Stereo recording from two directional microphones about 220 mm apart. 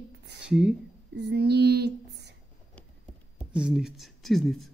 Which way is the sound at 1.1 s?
50° right (ahead or behind).